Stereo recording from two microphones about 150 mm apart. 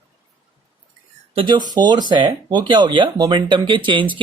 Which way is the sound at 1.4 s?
30° right (ahead or behind).